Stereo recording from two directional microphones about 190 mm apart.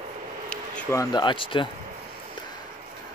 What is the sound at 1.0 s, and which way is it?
Speech, 25° left (ahead or behind).